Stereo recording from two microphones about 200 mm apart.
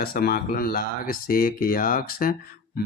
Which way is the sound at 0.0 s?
50° left (ahead or behind).